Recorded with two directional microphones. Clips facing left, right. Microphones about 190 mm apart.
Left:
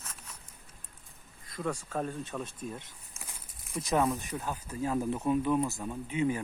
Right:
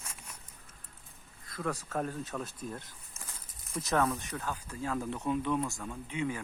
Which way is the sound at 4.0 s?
15° left (ahead or behind).